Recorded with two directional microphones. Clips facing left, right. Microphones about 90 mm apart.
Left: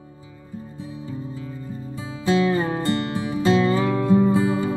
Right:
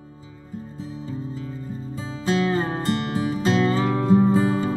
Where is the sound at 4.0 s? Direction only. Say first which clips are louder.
Right 1 dB; 25° right (ahead or behind).